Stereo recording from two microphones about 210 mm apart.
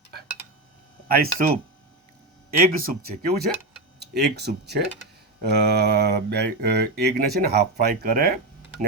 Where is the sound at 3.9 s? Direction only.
50° right (ahead or behind).